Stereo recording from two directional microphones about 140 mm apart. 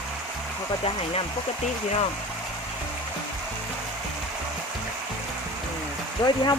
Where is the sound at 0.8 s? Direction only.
40° left (ahead or behind).